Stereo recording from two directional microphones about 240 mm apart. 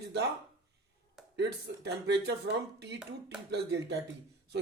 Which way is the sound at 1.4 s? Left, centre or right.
Right.